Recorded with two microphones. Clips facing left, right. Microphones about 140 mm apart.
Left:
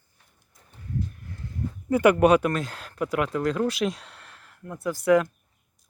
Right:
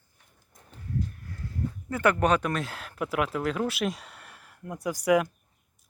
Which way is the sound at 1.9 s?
10° left (ahead or behind).